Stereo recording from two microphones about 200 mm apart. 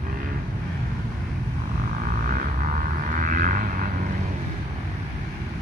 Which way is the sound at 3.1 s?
40° right (ahead or behind).